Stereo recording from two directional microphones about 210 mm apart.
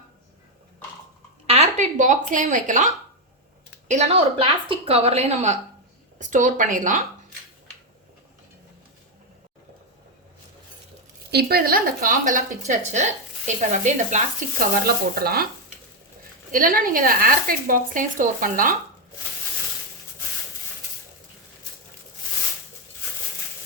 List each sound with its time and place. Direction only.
1.5 s a woman's voice: 30° right (ahead or behind)
3.8 s a woman's voice: 35° right (ahead or behind)
11.3 s a woman's voice: 50° right (ahead or behind)
16.5 s a woman's voice: 40° right (ahead or behind)